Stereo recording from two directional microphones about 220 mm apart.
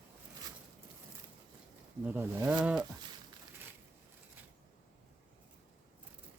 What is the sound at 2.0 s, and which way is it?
Speech, 10° right (ahead or behind).